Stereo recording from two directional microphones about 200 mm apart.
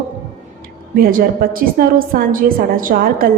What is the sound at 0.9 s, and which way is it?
A woman's voice, 45° right (ahead or behind).